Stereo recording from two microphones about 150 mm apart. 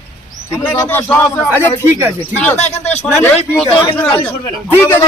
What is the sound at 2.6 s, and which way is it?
Speech, 45° left (ahead or behind).